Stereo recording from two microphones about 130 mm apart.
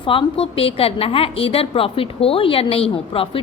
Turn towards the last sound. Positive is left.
turn(degrees=45)  # may be behind; listen again after turning